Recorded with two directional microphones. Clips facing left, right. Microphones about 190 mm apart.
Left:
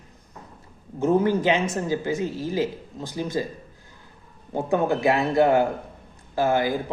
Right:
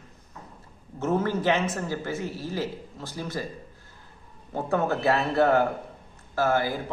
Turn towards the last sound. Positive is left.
turn(degrees=15)  # may be behind; listen again after turning